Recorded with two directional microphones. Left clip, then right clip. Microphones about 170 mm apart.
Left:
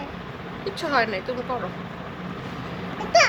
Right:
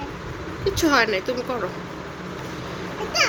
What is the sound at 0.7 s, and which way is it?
Speech, 30° right (ahead or behind).